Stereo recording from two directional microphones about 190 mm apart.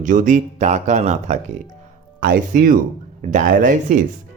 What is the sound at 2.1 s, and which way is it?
Speech, 50° right (ahead or behind).